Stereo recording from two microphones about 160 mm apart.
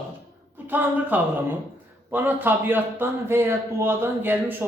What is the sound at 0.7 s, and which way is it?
A man's voice, 10° right (ahead or behind).